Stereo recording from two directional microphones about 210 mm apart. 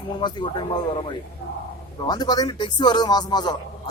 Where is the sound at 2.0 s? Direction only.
20° left (ahead or behind).